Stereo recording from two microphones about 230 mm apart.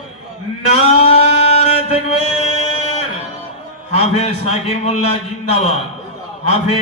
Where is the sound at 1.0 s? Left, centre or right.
Left.